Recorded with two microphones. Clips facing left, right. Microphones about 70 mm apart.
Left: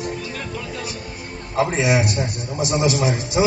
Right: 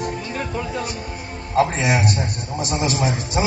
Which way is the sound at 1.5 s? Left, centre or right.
Right.